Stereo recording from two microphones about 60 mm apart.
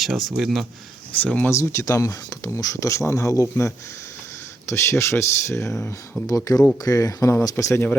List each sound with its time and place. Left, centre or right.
0.0 s speech: centre
1.2 s speech: left
1.5 s speech: left
2.6 s speech: left
4.7 s speech: left
6.2 s speech: left
6.8 s speech: left
7.6 s speech: left